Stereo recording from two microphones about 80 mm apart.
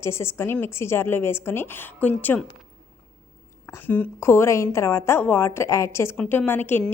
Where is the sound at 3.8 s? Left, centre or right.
Left.